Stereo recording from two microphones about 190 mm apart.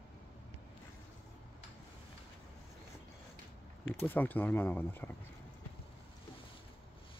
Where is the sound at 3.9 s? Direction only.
10° left (ahead or behind).